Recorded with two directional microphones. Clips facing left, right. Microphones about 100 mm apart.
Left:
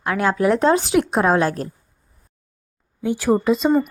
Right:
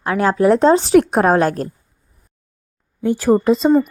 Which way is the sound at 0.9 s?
50° right (ahead or behind).